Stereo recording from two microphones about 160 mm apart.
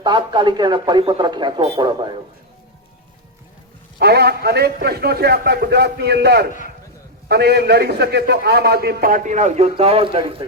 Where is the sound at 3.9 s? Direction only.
90° right; by 10.4 s 35° right (ahead or behind).